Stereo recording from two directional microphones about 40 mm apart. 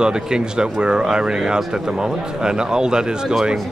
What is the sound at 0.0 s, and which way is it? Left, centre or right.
Speech, centre.